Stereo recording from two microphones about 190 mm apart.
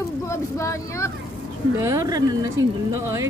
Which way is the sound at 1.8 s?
15° right (ahead or behind).